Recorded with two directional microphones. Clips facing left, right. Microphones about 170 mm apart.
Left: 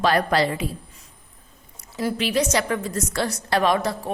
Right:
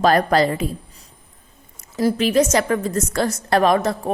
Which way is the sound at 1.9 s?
40° right (ahead or behind).